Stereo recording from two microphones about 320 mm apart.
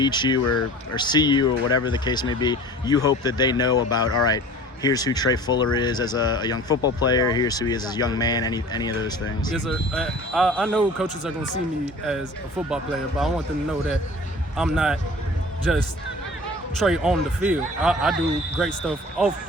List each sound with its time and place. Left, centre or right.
0.0 s speech: centre
0.3 s speech: left
0.9 s speech: centre
9.5 s speech: centre
15.7 s speech: centre